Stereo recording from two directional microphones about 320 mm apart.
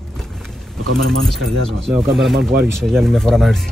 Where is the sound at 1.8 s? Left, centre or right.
Centre.